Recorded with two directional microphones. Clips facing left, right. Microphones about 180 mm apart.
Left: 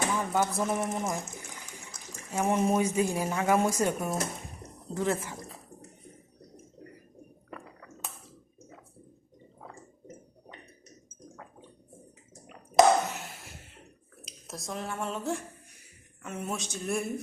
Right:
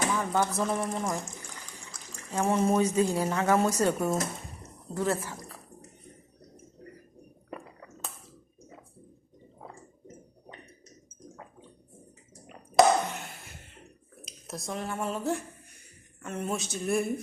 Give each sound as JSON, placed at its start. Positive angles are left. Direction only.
{"t": 0.3, "sound": "speech", "side_deg": 5}
{"t": 0.8, "sound": "speech", "side_deg": 20}
{"t": 2.4, "sound": "speech", "side_deg": 15}
{"t": 12.5, "sound": "a sound", "side_deg": 0}
{"t": 14.3, "sound": "speech", "side_deg": 0}